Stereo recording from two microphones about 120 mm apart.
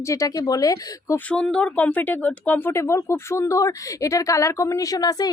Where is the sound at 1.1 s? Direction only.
5° left (ahead or behind).